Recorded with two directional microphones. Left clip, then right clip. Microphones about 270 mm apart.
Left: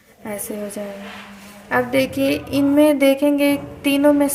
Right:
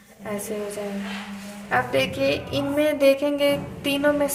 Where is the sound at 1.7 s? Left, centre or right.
Left.